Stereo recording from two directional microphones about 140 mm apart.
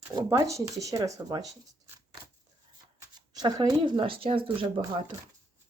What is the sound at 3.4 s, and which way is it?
Speech, 30° right (ahead or behind).